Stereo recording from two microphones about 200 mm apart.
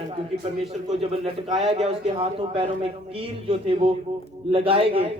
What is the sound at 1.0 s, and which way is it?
A man's voice, 30° right (ahead or behind).